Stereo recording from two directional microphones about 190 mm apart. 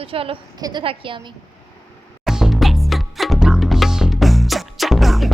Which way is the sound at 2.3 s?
5° right (ahead or behind).